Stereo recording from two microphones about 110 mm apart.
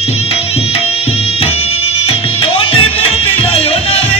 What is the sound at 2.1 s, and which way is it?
Music, 60° left (ahead or behind).